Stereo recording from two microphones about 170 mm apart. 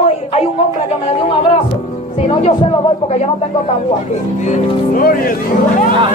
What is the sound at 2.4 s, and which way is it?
Music, 35° left (ahead or behind).